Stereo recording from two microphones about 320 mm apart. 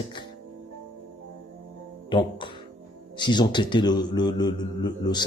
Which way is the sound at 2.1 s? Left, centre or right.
Centre.